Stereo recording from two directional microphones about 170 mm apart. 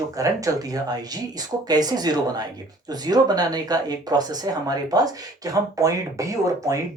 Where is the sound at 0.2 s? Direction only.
20° right (ahead or behind).